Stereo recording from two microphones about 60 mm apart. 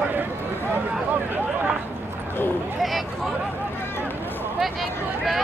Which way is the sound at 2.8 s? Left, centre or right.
Centre.